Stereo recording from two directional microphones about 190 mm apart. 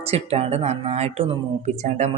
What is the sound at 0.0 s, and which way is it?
Speech, 30° right (ahead or behind).